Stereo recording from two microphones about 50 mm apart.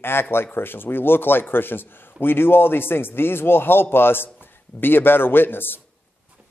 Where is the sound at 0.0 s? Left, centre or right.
Left.